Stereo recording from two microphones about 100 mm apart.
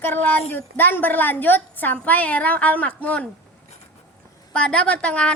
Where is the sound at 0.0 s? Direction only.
20° left (ahead or behind).